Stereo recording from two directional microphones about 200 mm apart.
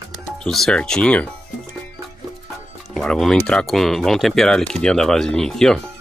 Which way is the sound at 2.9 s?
Centre (ahead or behind).